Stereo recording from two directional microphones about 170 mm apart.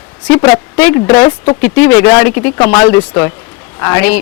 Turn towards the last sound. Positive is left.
turn(degrees=10)  # may be behind; listen again after turning